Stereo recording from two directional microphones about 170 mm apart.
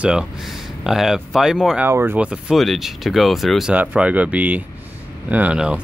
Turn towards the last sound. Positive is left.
turn(degrees=-5)  # may be behind; listen again after turning